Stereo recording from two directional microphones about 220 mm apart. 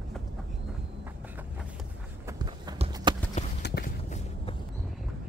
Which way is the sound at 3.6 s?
50° left (ahead or behind).